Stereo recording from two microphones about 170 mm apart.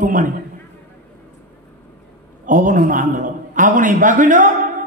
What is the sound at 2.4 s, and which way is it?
A man's voice, 50° right (ahead or behind).